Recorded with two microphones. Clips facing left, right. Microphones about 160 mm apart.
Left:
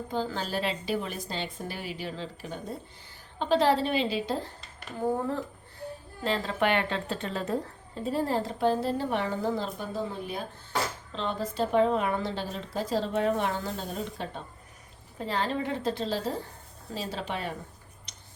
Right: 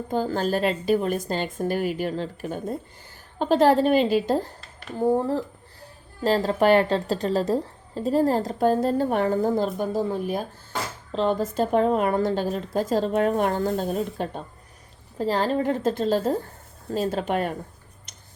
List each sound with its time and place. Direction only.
0.1 s a woman's voice: 45° right (ahead or behind)
6.2 s a woman's voice: 40° right (ahead or behind)
18.1 s a sound: 50° right (ahead or behind)